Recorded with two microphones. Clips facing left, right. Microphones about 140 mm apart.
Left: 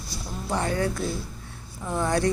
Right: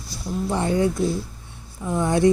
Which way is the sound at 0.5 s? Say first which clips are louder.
Right 4 dB; 20° right (ahead or behind).